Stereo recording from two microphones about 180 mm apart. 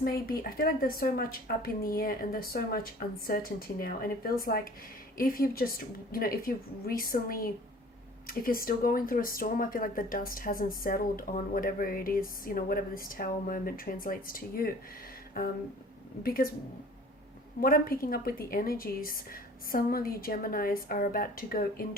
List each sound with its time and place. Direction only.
0.0 s a woman's voice: 55° left (ahead or behind)
17.6 s speech: 55° left (ahead or behind)